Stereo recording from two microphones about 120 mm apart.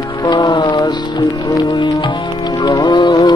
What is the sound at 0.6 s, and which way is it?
Music, 40° left (ahead or behind).